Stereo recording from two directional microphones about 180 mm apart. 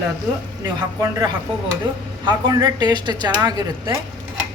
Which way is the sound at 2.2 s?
20° right (ahead or behind).